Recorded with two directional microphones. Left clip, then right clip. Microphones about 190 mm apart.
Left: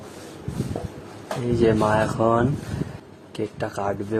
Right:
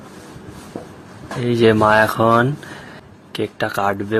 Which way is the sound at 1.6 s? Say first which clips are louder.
Right 7 dB; 10° right (ahead or behind).